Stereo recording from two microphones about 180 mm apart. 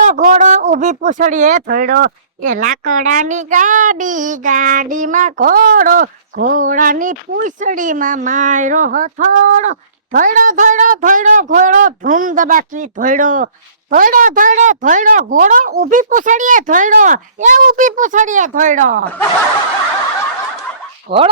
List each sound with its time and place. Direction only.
0.0 s a sound: 45° right (ahead or behind)
1.6 s speech: 55° right (ahead or behind)
21.1 s speech: 30° right (ahead or behind)